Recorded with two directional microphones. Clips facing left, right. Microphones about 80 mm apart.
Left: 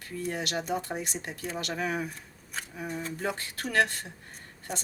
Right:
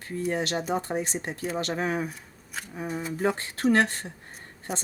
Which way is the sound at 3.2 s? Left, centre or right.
Right.